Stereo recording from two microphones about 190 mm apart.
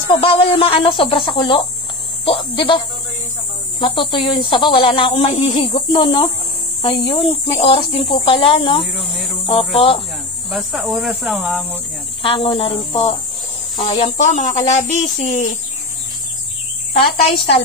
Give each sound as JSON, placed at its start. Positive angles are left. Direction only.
{"t": 0.1, "sound": "speech", "side_deg": 30}
{"t": 3.8, "sound": "speech", "side_deg": 25}
{"t": 10.5, "sound": "speech", "side_deg": 0}
{"t": 12.2, "sound": "speech", "side_deg": 25}
{"t": 16.9, "sound": "speech", "side_deg": 30}